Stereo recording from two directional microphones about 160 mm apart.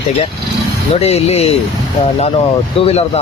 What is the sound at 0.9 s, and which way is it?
Speech, 40° left (ahead or behind).